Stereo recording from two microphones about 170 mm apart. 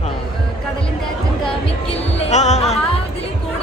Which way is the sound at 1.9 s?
40° left (ahead or behind).